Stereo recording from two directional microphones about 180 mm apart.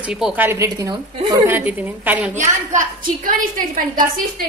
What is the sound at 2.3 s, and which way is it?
A woman's voice, 40° right (ahead or behind).